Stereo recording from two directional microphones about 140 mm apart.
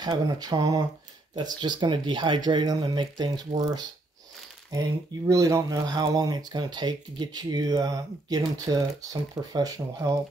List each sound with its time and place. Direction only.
0.0 s speech: 30° right (ahead or behind)